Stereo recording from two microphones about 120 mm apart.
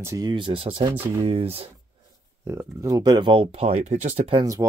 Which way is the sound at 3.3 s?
50° right (ahead or behind).